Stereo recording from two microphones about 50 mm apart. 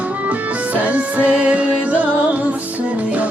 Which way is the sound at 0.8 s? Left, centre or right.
Right.